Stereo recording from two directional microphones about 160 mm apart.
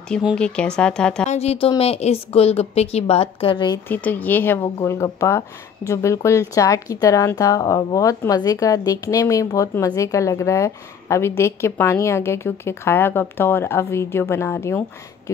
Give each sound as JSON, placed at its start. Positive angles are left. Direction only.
{"t": 0.1, "sound": "speech", "side_deg": 0}
{"t": 1.2, "sound": "a woman's voice", "side_deg": 45}
{"t": 3.9, "sound": "a woman's voice", "side_deg": 10}